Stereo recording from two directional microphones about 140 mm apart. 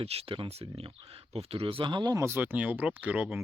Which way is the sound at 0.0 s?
45° right (ahead or behind).